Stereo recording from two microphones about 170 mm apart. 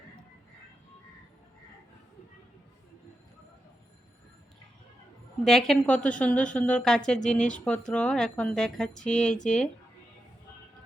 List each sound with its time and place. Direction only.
5.5 s a woman's voice: centre (ahead or behind)